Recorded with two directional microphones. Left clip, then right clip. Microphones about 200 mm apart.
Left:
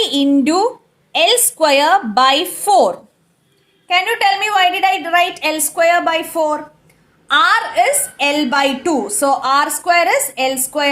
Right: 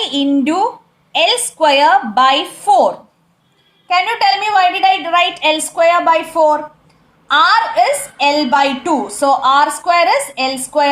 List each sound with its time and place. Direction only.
0.0 s a woman's voice: 50° left (ahead or behind)
9.0 s speech: 25° left (ahead or behind)
9.2 s a woman's voice: 45° left (ahead or behind)